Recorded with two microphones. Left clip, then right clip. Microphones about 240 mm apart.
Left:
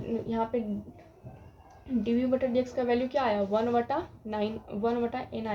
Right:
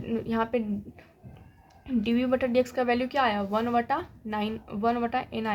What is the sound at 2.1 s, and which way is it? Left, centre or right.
A woman's voice, right.